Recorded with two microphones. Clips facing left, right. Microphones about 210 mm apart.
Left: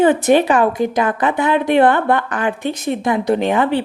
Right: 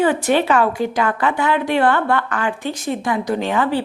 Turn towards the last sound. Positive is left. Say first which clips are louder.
# left 3 dB
turn(degrees=20)  # may be behind; listen again after turning